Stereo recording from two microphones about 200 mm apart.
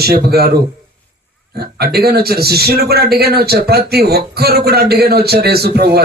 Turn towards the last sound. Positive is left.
turn(degrees=-50)  # may be behind; listen again after turning